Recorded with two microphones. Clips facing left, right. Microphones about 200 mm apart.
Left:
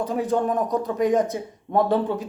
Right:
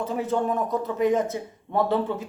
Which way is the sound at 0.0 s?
15° left (ahead or behind).